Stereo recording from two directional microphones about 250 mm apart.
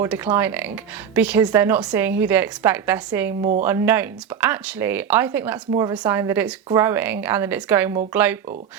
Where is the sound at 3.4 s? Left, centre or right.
Right.